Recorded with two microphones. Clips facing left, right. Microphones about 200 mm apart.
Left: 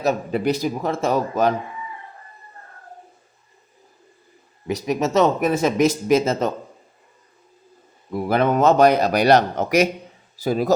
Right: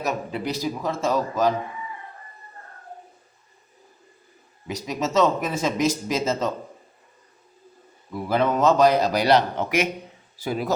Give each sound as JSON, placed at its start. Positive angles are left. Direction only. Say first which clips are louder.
{"t": 0.3, "sound": "speech", "louder": "left 6 dB", "side_deg": 50}
{"t": 4.7, "sound": "speech", "louder": "left 4 dB", "side_deg": 60}
{"t": 8.1, "sound": "speech", "louder": "left 3 dB", "side_deg": 60}